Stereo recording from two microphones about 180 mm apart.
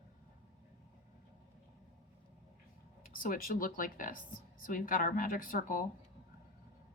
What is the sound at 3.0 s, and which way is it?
A woman's voice, 50° left (ahead or behind).